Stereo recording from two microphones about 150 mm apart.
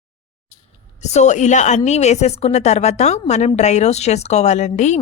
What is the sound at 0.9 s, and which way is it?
A woman's voice, 50° left (ahead or behind).